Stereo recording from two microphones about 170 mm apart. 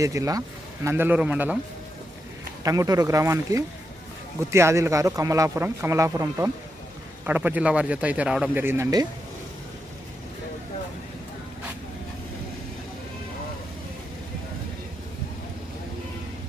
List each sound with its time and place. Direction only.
0.0 s speech: 20° right (ahead or behind)
2.6 s speech: 20° right (ahead or behind)